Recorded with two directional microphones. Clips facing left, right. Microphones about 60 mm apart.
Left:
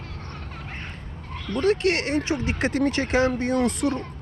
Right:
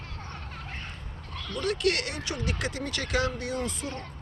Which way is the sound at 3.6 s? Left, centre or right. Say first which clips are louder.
Left 10 dB; left.